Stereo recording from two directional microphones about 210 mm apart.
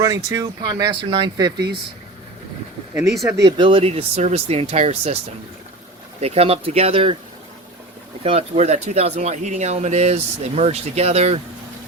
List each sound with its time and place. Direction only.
0.0 s speech: 15° right (ahead or behind)
3.4 s speech: 25° right (ahead or behind)
6.1 s speech: 30° right (ahead or behind)
8.2 s speech: 30° right (ahead or behind)